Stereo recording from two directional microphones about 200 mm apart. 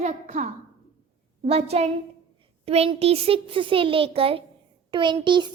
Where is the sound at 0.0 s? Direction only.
35° right (ahead or behind).